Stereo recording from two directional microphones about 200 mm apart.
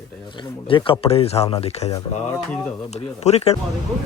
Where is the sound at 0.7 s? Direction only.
25° left (ahead or behind).